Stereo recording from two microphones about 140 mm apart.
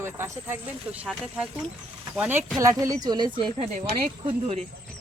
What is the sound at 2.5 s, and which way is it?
A woman's voice, 25° right (ahead or behind).